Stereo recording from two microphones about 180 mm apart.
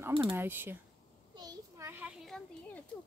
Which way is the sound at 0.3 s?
10° right (ahead or behind).